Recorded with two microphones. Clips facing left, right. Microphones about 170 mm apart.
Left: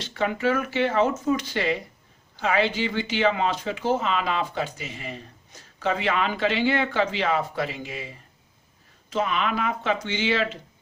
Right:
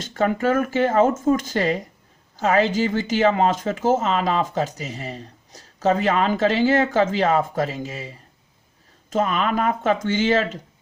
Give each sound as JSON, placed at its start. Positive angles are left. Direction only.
{"t": 0.0, "sound": "speech", "side_deg": -45}